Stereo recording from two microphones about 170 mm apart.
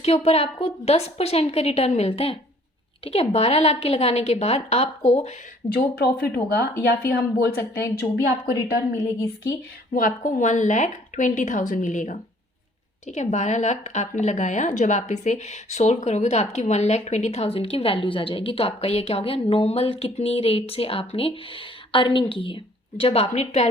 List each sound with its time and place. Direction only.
0.0 s a woman's voice: 35° left (ahead or behind)
5.6 s a woman's voice: 65° left (ahead or behind)
7.6 s a woman's voice: 15° left (ahead or behind)
9.9 s a woman's voice: 50° left (ahead or behind)